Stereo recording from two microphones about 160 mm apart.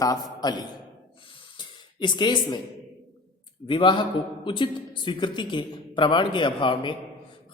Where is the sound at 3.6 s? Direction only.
30° left (ahead or behind).